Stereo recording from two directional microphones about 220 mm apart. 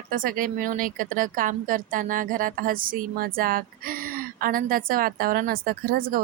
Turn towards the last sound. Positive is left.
turn(degrees=-40)  # may be behind; listen again after turning